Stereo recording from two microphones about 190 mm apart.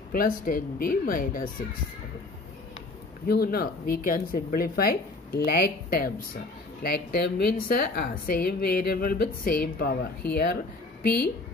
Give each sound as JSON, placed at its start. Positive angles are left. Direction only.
{"t": 0.1, "sound": "a woman's voice", "side_deg": 50}
{"t": 3.3, "sound": "a woman's voice", "side_deg": 55}